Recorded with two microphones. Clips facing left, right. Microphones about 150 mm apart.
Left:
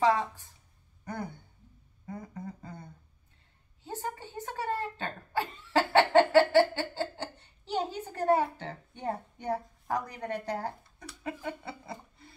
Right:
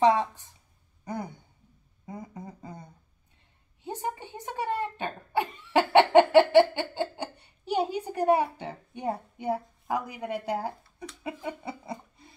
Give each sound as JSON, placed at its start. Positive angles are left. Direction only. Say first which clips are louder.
{"t": 0.0, "sound": "a woman's voice", "louder": "right 4 dB", "side_deg": -20}
{"t": 2.0, "sound": "a sound", "louder": "even", "side_deg": -15}
{"t": 3.8, "sound": "speech", "louder": "right 4 dB", "side_deg": -20}
{"t": 11.4, "sound": "chuckle", "louder": "right 3 dB", "side_deg": -15}